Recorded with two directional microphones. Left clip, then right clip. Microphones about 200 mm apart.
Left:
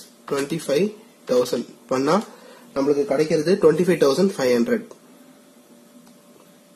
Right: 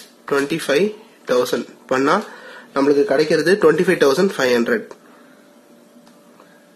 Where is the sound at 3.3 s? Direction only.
20° right (ahead or behind).